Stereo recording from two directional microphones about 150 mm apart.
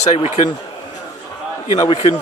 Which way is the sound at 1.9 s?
40° left (ahead or behind).